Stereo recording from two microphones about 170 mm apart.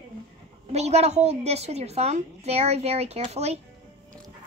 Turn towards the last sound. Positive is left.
turn(degrees=-40)  # may be behind; listen again after turning